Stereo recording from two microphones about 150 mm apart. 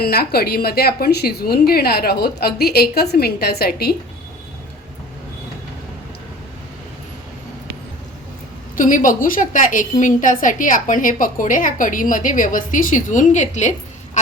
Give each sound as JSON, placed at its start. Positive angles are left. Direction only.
{"t": 0.0, "sound": "a woman's voice", "side_deg": 90}
{"t": 8.7, "sound": "a woman's voice", "side_deg": 60}